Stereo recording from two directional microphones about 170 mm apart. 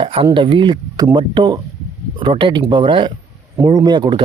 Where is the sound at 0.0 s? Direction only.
30° right (ahead or behind).